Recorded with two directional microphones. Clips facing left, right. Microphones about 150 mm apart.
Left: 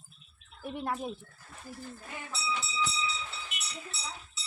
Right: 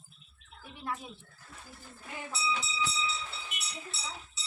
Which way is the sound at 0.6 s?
60° left (ahead or behind).